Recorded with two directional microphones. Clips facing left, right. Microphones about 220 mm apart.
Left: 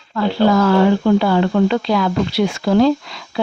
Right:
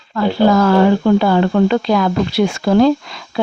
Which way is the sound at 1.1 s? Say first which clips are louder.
Right 2 dB; 45° right (ahead or behind).